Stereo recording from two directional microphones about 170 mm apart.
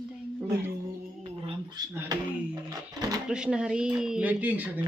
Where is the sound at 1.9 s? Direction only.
20° right (ahead or behind).